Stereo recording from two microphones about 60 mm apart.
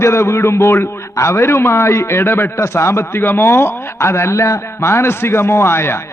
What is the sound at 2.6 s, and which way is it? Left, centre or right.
A man's voice, left.